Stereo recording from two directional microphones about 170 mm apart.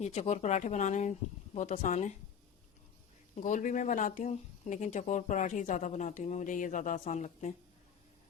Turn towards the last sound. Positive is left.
turn(degrees=45)  # may be behind; listen again after turning